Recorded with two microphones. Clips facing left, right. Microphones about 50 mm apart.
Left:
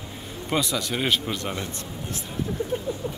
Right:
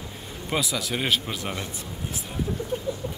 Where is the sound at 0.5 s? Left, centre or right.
Centre.